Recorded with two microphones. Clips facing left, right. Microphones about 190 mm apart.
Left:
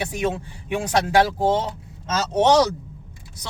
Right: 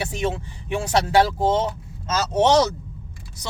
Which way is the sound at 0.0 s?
15° left (ahead or behind).